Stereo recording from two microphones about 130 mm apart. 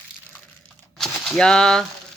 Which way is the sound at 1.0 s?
5° left (ahead or behind).